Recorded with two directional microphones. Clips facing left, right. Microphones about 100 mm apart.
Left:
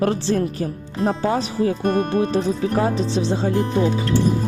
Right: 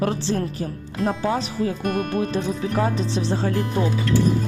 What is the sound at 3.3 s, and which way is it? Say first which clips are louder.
Speech: left 1 dB; 20° left (ahead or behind).